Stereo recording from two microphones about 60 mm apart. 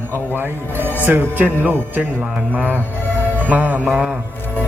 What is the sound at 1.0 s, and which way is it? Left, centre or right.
Music, right.